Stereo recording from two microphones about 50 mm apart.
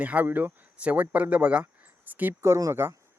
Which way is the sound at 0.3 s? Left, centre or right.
Right.